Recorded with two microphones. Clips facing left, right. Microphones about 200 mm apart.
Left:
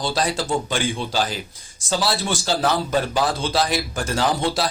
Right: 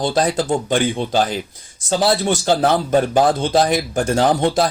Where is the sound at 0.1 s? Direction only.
50° right (ahead or behind).